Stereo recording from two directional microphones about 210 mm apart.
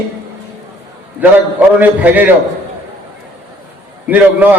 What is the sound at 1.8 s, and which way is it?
Speech, 10° right (ahead or behind).